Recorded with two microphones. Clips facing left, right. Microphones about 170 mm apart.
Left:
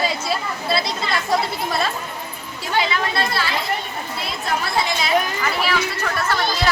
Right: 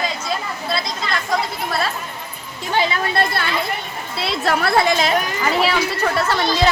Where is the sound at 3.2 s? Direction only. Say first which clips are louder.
Right 2 dB; 55° right (ahead or behind).